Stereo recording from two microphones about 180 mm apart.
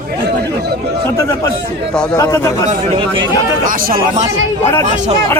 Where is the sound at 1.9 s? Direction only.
5° left (ahead or behind).